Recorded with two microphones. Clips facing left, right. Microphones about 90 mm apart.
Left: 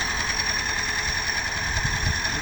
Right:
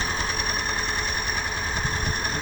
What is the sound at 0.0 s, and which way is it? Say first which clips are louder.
Engine: right 1 dB; 40° right (ahead or behind).